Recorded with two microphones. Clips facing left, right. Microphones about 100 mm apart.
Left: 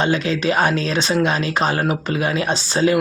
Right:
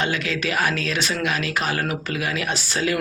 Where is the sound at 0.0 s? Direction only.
25° left (ahead or behind).